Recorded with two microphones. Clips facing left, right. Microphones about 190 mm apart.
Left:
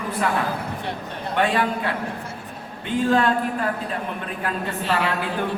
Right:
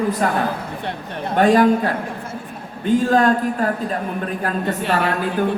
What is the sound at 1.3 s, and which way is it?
A woman's voice, 40° right (ahead or behind).